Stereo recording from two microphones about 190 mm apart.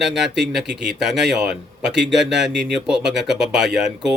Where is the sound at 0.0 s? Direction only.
Centre (ahead or behind).